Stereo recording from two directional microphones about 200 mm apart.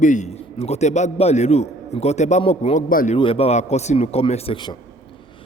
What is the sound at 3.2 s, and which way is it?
Speech, 30° left (ahead or behind).